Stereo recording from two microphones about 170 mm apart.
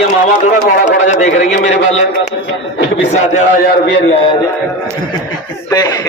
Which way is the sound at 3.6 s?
75° left (ahead or behind).